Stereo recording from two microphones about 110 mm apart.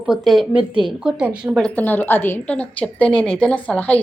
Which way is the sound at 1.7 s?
15° left (ahead or behind).